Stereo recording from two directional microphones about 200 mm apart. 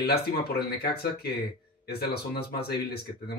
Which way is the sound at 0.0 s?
50° left (ahead or behind).